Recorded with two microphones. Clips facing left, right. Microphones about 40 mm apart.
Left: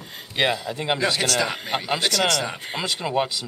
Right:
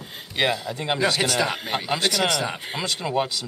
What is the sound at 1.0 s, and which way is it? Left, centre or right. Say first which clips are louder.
Speech: right 2 dB; centre.